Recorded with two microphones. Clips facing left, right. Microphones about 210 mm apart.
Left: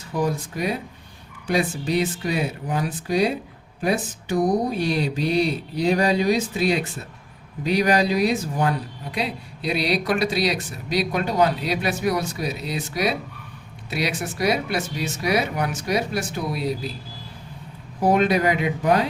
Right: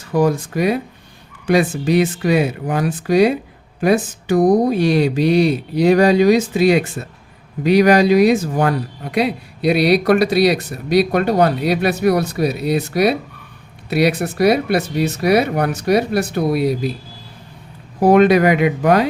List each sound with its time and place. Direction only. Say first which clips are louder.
0.1 s speech: right 8 dB; 80° right
1.8 s speech: right 7 dB; 90° right
9.1 s speech: right 10 dB; 70° right (ahead or behind)
18.0 s speech: right 8 dB; 80° right